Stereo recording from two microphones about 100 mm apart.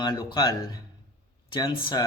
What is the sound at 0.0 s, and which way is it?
Speech, 50° left (ahead or behind).